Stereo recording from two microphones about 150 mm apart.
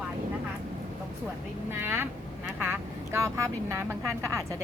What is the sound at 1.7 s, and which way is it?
Speech, 15° right (ahead or behind).